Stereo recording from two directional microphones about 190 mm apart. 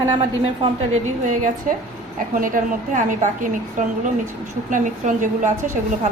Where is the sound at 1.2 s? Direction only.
45° right (ahead or behind).